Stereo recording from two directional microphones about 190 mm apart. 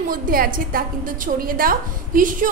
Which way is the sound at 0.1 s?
50° right (ahead or behind).